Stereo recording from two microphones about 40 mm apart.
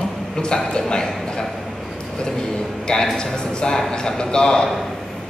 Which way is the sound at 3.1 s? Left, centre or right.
Centre.